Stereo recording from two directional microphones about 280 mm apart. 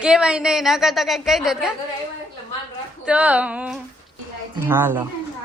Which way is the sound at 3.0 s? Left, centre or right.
Centre.